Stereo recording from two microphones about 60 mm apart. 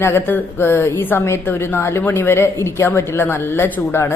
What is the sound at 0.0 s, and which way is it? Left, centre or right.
A woman's voice, left.